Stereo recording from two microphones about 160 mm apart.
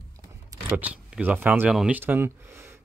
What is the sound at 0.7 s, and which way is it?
Speech, 10° right (ahead or behind).